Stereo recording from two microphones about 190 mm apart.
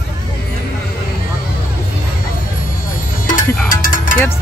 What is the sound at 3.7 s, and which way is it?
Music, 45° left (ahead or behind).